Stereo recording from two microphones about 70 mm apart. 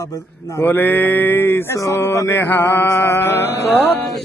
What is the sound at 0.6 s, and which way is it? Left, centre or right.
A man's voice, left.